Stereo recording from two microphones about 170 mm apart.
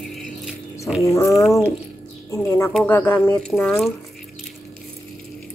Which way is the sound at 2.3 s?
15° left (ahead or behind).